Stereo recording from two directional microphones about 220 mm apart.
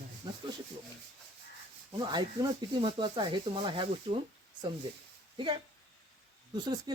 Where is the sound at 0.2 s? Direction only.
15° right (ahead or behind).